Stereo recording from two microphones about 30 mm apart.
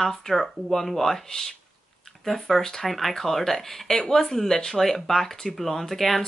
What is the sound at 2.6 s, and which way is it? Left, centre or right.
Speech, centre.